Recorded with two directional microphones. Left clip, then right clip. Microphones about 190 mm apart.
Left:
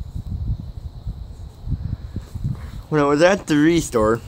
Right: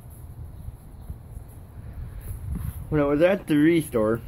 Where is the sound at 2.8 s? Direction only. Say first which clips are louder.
Left 5 dB; 35° left (ahead or behind).